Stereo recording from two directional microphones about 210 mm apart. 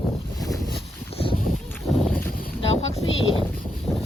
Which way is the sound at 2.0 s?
5° left (ahead or behind).